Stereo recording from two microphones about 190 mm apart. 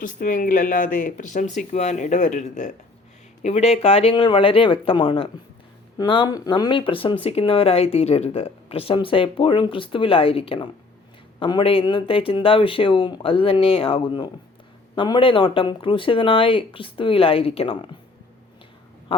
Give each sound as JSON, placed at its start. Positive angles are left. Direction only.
{"t": 0.0, "sound": "speech", "side_deg": 45}